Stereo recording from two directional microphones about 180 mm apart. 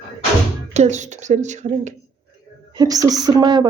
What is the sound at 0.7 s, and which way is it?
Speech, 40° right (ahead or behind).